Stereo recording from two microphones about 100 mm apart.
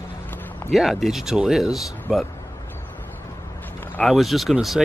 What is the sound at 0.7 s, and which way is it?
Speech, centre (ahead or behind).